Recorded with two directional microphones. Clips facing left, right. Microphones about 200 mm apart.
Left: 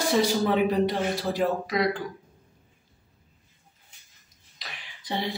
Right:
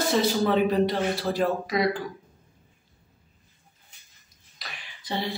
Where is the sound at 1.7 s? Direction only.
Centre (ahead or behind).